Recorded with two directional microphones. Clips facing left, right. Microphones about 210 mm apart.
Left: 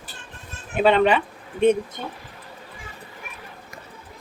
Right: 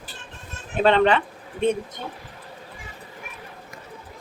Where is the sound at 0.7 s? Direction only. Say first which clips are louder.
Left 1 dB; 10° left (ahead or behind).